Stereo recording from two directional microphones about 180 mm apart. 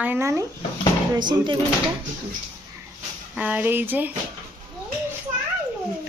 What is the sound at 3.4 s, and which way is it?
Speech, 10° right (ahead or behind).